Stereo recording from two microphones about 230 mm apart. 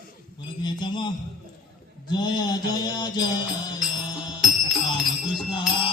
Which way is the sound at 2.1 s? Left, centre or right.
Centre.